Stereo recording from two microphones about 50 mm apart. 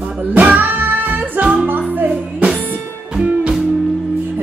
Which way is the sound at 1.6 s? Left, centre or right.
Right.